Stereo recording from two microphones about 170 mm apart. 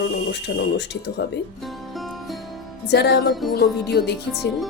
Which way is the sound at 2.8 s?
80° left.